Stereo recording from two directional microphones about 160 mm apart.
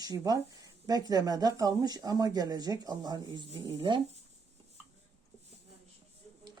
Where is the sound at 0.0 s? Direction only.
25° right (ahead or behind).